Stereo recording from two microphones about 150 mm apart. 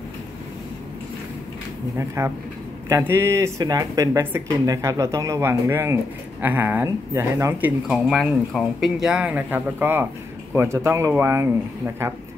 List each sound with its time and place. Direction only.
2.0 s speech: 20° right (ahead or behind)
7.9 s speech: centre (ahead or behind); by 12.1 s 15° right (ahead or behind)